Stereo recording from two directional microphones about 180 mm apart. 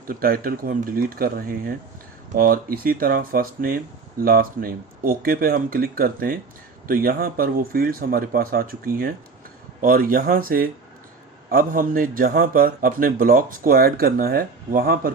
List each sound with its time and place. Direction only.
0.1 s a man's voice: 55° right (ahead or behind)